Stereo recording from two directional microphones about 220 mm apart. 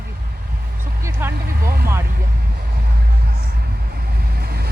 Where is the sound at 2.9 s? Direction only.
45° right (ahead or behind).